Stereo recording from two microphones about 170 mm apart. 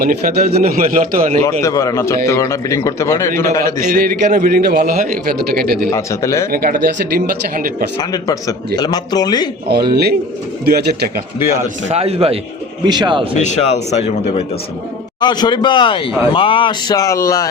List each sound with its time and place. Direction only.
0.0 s a man's voice: 55° right (ahead or behind)
1.6 s a man's voice: 20° left (ahead or behind)
3.8 s a man's voice: 55° right (ahead or behind)
5.9 s a man's voice: 15° left (ahead or behind)
6.5 s a man's voice: 60° right (ahead or behind)
8.1 s a man's voice: 20° left (ahead or behind)
9.9 s speech: 70° right (ahead or behind)
11.9 s a man's voice: 40° right (ahead or behind)
12.8 s speech: 25° right (ahead or behind)
13.3 s speech: 45° left (ahead or behind)
15.2 s a man's voice: 25° left (ahead or behind)